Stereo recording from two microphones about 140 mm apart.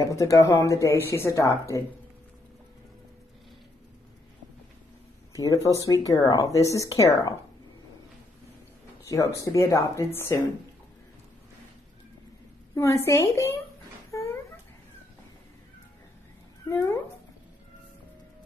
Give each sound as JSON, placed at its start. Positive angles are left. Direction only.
{"t": 0.0, "sound": "speech", "side_deg": 20}
{"t": 5.3, "sound": "speech", "side_deg": 25}
{"t": 9.1, "sound": "speech", "side_deg": 25}
{"t": 12.7, "sound": "speech", "side_deg": 20}
{"t": 14.1, "sound": "a sound", "side_deg": 20}
{"t": 16.6, "sound": "speech", "side_deg": 20}